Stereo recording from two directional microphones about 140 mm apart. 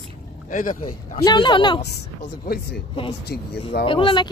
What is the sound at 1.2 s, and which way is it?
Speech, 35° left (ahead or behind).